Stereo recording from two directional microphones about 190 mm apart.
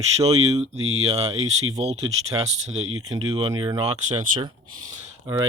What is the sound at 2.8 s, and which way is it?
Speech, 90° right.